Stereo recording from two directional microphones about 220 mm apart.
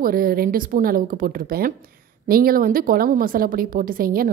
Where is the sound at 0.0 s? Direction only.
40° right (ahead or behind).